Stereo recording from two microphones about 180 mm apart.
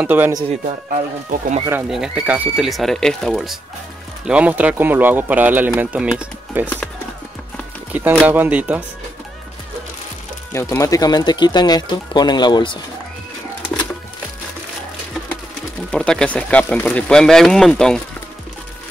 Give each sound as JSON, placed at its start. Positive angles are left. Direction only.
{"t": 0.0, "sound": "speech", "side_deg": -10}
{"t": 0.5, "sound": "speech", "side_deg": -40}
{"t": 1.9, "sound": "speech", "side_deg": -5}
{"t": 7.9, "sound": "speech", "side_deg": -5}
{"t": 10.5, "sound": "speech", "side_deg": 15}
{"t": 15.9, "sound": "speech", "side_deg": 5}